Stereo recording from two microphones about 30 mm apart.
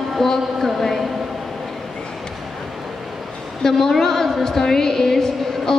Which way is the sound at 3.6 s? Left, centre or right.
Centre.